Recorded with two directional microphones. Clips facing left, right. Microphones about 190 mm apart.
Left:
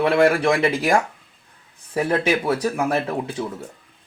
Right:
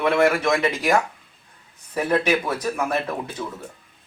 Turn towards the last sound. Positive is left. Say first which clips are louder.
# left 3 dB
turn(degrees=30)  # may be behind; listen again after turning